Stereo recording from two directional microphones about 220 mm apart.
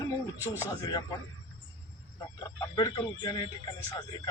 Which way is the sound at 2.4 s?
20° left (ahead or behind).